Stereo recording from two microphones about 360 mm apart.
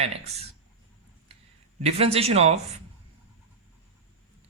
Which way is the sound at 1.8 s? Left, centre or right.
Centre.